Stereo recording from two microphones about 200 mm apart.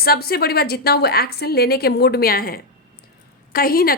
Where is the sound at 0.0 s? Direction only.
50° left (ahead or behind).